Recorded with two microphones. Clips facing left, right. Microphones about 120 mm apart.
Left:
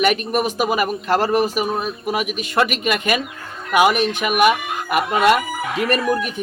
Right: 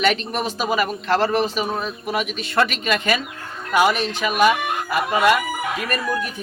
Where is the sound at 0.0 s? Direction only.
10° left (ahead or behind).